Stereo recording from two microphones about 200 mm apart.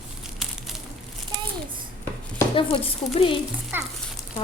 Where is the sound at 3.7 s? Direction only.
10° right (ahead or behind).